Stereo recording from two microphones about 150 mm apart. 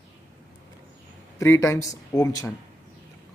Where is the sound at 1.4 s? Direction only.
20° left (ahead or behind).